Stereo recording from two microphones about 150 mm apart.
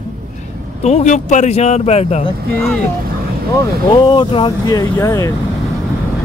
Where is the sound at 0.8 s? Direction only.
50° left (ahead or behind).